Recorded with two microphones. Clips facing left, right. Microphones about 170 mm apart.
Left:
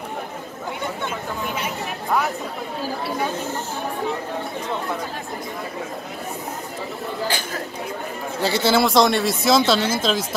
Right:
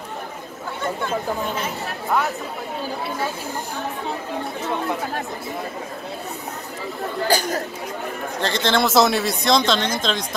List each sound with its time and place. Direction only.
7.2 s speech: 40° right (ahead or behind)
8.4 s speech: 10° left (ahead or behind)